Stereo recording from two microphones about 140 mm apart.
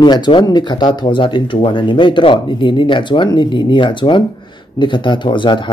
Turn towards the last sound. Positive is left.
turn(degrees=35)  # may be behind; listen again after turning